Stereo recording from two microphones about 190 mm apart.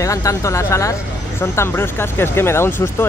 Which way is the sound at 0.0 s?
15° left (ahead or behind).